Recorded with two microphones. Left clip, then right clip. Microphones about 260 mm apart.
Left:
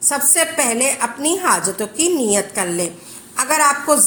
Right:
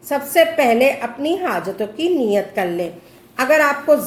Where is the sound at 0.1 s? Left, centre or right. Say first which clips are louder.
Right 5 dB; left.